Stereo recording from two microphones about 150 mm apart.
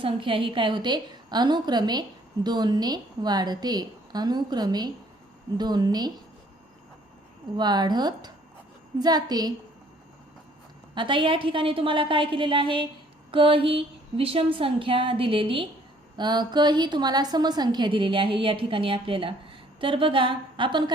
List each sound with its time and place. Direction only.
0.0 s a woman's voice: 35° right (ahead or behind)
7.5 s a woman's voice: 30° right (ahead or behind)
10.9 s a woman's voice: 35° right (ahead or behind)